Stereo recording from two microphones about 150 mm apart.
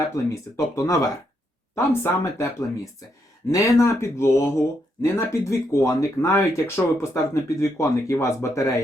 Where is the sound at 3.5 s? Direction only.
20° left (ahead or behind).